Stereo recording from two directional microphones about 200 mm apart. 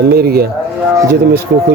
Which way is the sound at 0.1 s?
50° right (ahead or behind).